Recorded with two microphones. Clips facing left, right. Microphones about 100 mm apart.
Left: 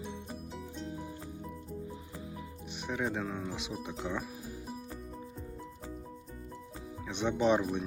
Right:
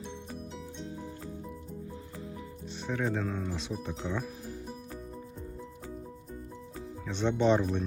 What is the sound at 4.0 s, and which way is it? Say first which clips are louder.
Music: right 1 dB; 10° left (ahead or behind).